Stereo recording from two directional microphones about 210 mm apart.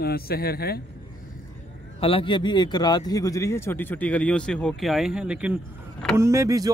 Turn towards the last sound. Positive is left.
turn(degrees=-15)  # may be behind; listen again after turning